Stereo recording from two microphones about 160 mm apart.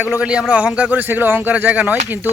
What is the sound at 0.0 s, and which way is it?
Speech, 10° right (ahead or behind).